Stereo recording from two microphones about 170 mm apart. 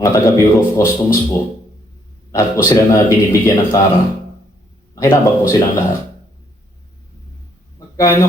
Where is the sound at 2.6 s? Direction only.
15° left (ahead or behind).